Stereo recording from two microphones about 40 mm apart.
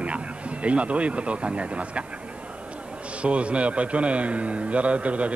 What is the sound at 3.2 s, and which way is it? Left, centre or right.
Speech, right.